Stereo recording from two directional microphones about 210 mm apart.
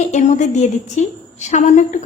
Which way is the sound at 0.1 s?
35° left (ahead or behind).